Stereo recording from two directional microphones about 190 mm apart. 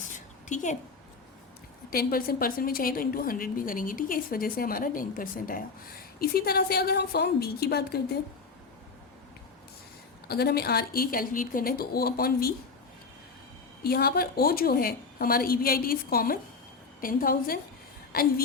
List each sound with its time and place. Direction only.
0.4 s a woman's voice: 40° left (ahead or behind)
1.9 s a woman's voice: 50° left (ahead or behind)
10.2 s a woman's voice: 55° left (ahead or behind)
13.8 s a woman's voice: 55° left (ahead or behind)